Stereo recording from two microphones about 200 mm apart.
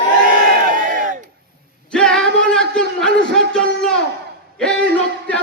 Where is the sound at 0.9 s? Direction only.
40° right (ahead or behind).